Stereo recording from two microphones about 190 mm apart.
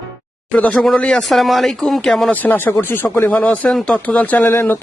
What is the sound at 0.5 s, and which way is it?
Speech, 5° left (ahead or behind).